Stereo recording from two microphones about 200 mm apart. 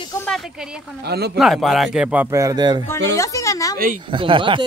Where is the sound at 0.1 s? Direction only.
10° left (ahead or behind).